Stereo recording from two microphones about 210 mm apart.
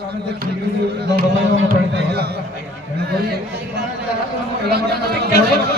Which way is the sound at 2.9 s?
50° right (ahead or behind).